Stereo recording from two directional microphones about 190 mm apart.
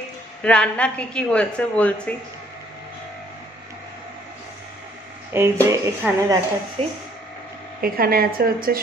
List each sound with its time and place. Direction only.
0.4 s a woman's voice: 5° left (ahead or behind)
5.3 s speech: 15° right (ahead or behind)
6.8 s speech: 30° right (ahead or behind)
7.8 s a woman's voice: 50° right (ahead or behind)